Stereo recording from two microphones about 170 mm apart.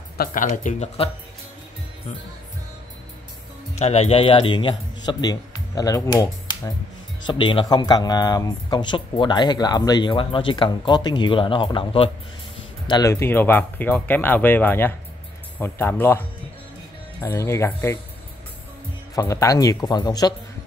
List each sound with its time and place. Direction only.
0.2 s speech: 50° left (ahead or behind)
3.7 s a man's voice: 40° left (ahead or behind); by 6.7 s 20° left (ahead or behind)
7.2 s speech: 30° left (ahead or behind); by 16.2 s 15° left (ahead or behind)
17.2 s speech: 15° left (ahead or behind)
19.1 s speech: 20° left (ahead or behind)